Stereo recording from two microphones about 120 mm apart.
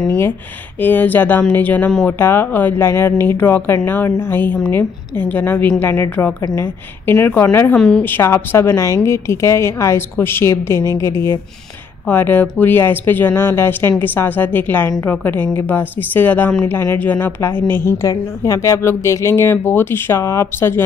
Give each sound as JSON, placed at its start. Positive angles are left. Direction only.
{"t": 0.7, "sound": "speech", "side_deg": 15}